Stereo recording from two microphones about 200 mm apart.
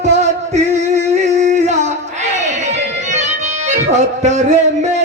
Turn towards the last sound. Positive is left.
turn(degrees=-35)  # may be behind; listen again after turning